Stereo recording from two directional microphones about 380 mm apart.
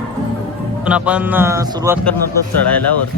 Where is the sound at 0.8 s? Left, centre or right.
Centre.